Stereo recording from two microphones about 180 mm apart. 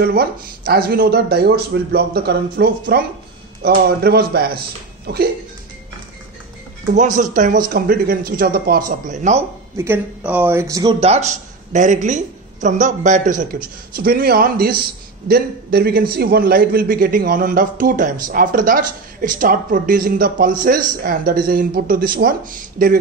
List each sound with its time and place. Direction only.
0.0 s speech: 60° right (ahead or behind)
6.9 s a woman's voice: 45° right (ahead or behind)
9.8 s speech: 10° right (ahead or behind)
11.0 s a woman's voice: 35° right (ahead or behind)